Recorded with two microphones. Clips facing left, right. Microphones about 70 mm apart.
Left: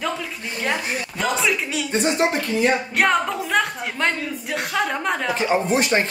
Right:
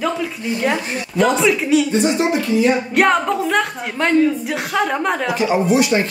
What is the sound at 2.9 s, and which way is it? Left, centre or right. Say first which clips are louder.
Speech: right 4 dB; centre.